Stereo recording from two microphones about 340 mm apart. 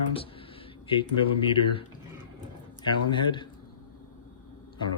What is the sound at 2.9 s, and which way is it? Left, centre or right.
Speech, centre.